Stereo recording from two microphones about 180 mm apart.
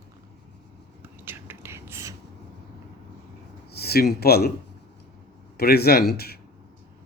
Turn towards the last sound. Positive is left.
turn(degrees=60)  # may be behind; listen again after turning